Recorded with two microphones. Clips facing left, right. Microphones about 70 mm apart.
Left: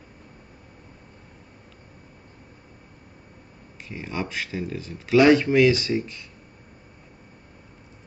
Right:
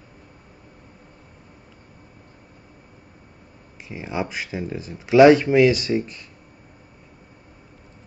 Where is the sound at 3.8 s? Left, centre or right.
Centre.